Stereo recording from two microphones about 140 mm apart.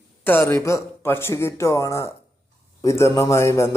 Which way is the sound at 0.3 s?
15° left (ahead or behind).